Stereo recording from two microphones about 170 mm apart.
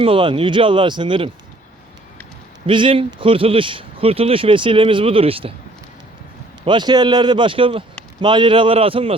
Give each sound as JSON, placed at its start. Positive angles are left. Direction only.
{"t": 0.0, "sound": "speech", "side_deg": -30}
{"t": 2.6, "sound": "speech", "side_deg": -30}
{"t": 6.7, "sound": "speech", "side_deg": -25}